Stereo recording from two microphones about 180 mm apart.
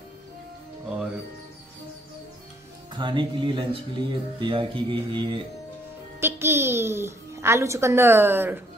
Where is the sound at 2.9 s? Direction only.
25° right (ahead or behind).